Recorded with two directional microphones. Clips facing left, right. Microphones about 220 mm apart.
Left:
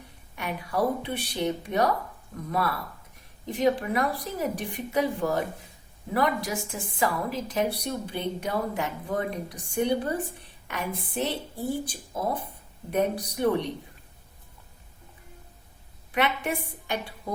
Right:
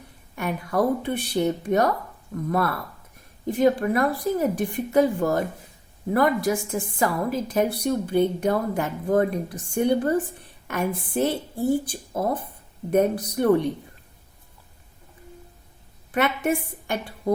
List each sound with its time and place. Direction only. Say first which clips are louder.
0.3 s a woman's voice: right 4 dB; 45° right (ahead or behind)
12.9 s a woman's voice: right 5 dB; 50° right (ahead or behind)
16.1 s a woman's voice: right 4 dB; 45° right (ahead or behind)